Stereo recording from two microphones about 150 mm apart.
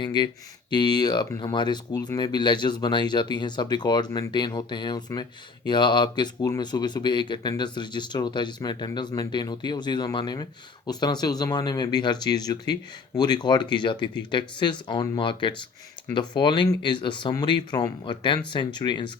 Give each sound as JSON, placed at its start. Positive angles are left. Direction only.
{"t": 0.0, "sound": "speech", "side_deg": 30}